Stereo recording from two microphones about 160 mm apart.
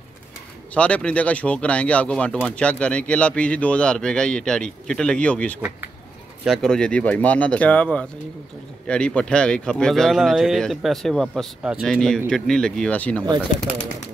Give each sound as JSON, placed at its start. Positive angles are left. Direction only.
{"t": 0.7, "sound": "speech", "side_deg": 10}